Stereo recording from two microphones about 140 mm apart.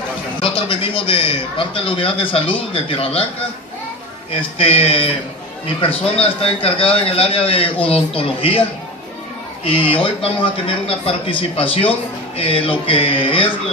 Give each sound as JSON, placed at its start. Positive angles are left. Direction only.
{"t": 0.4, "sound": "a man's voice", "side_deg": 40}
{"t": 4.4, "sound": "a man's voice", "side_deg": 45}
{"t": 9.7, "sound": "a man's voice", "side_deg": 40}